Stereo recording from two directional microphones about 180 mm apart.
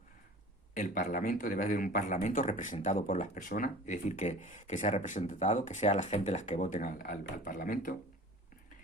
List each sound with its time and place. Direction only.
0.7 s a man's voice: 45° left (ahead or behind)